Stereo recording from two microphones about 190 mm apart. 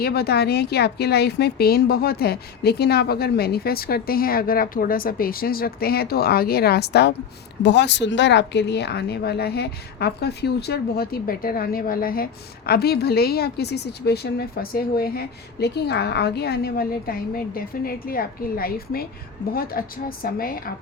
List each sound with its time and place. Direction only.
0.0 s a woman's voice: 55° left (ahead or behind)